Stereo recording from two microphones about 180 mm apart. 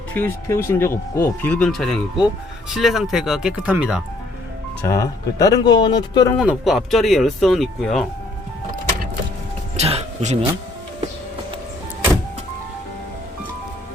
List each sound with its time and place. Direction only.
0.1 s speech: 10° left (ahead or behind); by 4.0 s 5° right (ahead or behind)
4.9 s speech: 20° left (ahead or behind)
6.3 s speech: 5° right (ahead or behind)
9.7 s a sound: 35° right (ahead or behind)